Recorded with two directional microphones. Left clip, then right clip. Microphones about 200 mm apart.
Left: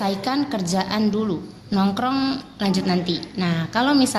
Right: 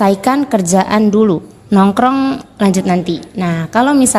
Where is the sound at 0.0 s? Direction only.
45° right (ahead or behind).